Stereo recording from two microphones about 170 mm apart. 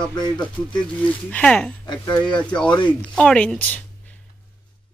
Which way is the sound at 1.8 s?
20° left (ahead or behind).